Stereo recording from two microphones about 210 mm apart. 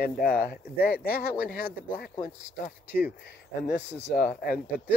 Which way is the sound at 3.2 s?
45° left (ahead or behind).